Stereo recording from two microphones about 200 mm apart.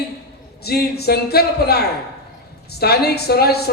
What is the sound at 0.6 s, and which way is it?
Speech, 55° left (ahead or behind).